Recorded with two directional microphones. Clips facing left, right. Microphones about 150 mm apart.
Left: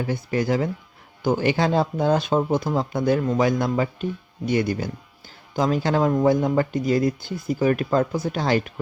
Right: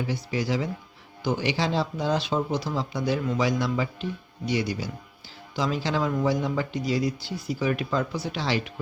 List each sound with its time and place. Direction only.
0.0 s speech: 50° left (ahead or behind)